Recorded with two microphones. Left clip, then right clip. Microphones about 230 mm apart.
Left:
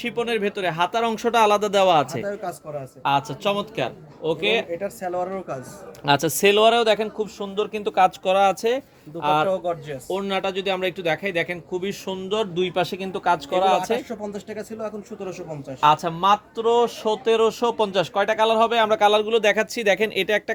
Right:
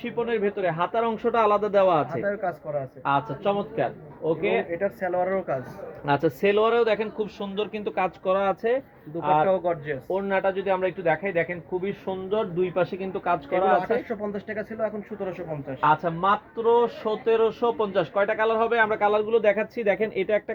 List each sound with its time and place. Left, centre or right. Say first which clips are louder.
0.0 s speech: left 2 dB; left
2.2 s speech: right 2 dB; centre
3.0 s speech: left 4 dB; left
4.7 s speech: right 1 dB; centre
6.1 s speech: left 4 dB; left
9.5 s speech: right 1 dB; centre
10.1 s speech: even; left
13.7 s speech: left 1 dB; centre
15.8 s speech: left 4 dB; left